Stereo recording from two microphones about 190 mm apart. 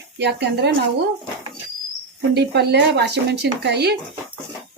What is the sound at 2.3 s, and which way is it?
Speech, 60° right (ahead or behind).